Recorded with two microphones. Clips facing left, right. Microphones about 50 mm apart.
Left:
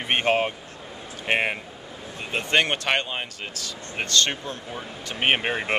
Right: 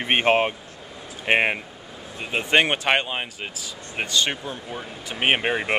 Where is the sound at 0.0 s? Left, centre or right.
Right.